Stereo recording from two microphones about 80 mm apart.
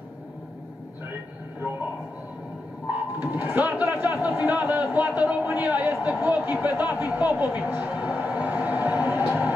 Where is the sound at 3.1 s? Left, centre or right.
Right.